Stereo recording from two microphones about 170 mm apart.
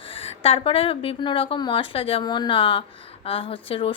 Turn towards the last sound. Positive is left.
turn(degrees=35)  # may be behind; listen again after turning